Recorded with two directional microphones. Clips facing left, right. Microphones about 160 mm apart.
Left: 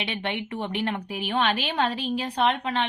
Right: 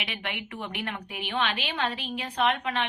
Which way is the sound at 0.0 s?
30° left (ahead or behind).